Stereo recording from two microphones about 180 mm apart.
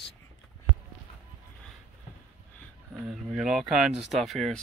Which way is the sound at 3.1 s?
5° right (ahead or behind).